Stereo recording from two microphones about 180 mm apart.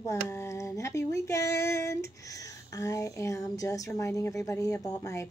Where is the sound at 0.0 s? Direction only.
15° left (ahead or behind).